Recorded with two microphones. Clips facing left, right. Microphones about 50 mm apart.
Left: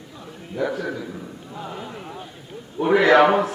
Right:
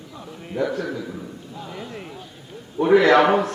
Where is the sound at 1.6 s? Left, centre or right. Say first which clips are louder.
Left 2 dB; left.